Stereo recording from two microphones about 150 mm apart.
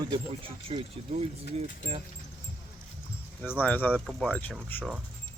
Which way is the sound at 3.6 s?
10° left (ahead or behind).